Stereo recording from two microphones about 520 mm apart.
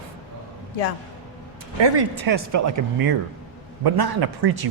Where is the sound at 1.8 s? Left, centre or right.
Right.